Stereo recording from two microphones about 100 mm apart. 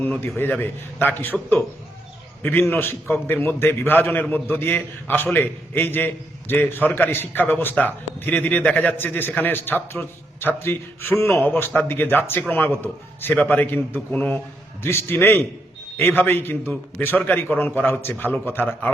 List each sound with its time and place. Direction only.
0.0 s speech: 20° left (ahead or behind)